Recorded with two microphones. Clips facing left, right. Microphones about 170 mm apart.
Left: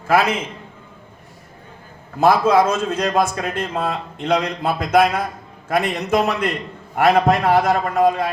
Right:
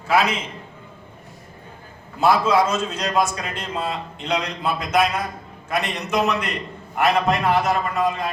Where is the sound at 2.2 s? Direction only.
55° left (ahead or behind).